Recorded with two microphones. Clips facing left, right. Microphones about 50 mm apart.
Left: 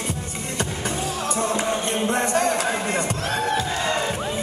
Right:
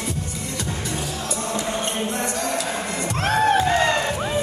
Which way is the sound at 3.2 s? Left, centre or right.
Right.